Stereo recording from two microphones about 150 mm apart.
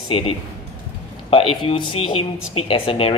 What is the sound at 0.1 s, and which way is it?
Speech, 40° left (ahead or behind).